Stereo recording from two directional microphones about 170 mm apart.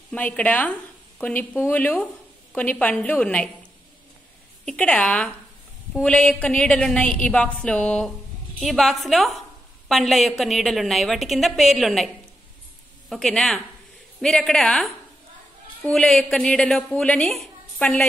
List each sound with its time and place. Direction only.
0.1 s a woman's voice: 10° left (ahead or behind)
4.6 s a woman's voice: 5° left (ahead or behind)
13.1 s a woman's voice: 5° left (ahead or behind)